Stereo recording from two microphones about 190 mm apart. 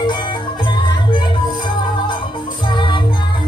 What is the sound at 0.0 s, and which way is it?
Music, 25° left (ahead or behind).